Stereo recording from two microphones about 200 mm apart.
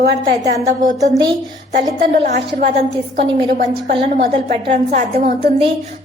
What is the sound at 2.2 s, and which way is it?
A woman's voice, 35° right (ahead or behind).